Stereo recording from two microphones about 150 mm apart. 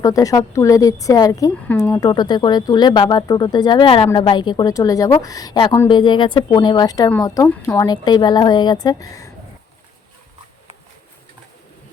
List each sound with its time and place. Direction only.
0.0 s speech: 20° left (ahead or behind)